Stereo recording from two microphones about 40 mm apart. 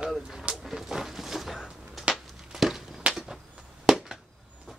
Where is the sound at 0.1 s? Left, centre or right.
Centre.